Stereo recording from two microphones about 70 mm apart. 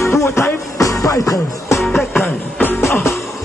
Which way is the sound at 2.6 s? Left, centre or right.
Left.